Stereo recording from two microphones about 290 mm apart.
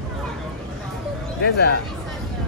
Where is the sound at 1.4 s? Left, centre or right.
Left.